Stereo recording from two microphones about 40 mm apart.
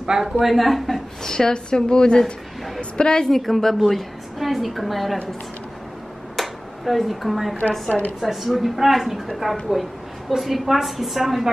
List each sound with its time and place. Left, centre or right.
0.0 s a woman's voice: centre
1.2 s a woman's voice: centre
3.3 s a woman's voice: centre
6.3 s finger snapping: centre
8.2 s a woman's voice: centre